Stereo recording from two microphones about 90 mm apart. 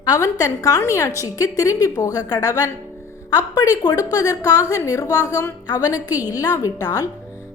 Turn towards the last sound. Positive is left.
turn(degrees=40)  # may be behind; listen again after turning